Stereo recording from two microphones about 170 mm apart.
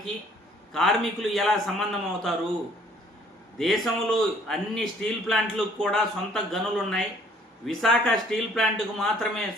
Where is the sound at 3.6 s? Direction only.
Centre (ahead or behind).